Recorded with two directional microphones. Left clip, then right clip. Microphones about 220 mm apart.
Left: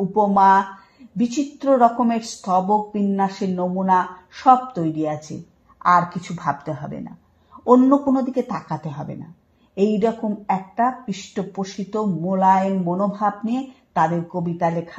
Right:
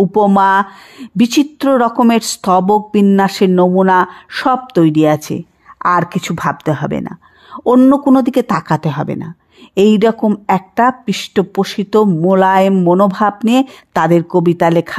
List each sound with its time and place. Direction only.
0.1 s a woman's voice: 45° right (ahead or behind)